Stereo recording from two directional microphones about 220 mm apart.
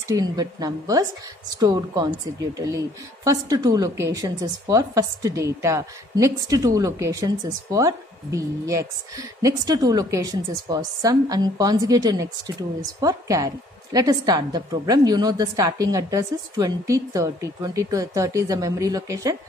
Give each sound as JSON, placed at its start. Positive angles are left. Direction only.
{"t": 0.1, "sound": "a woman's voice", "side_deg": -15}
{"t": 3.3, "sound": "a woman's voice", "side_deg": -15}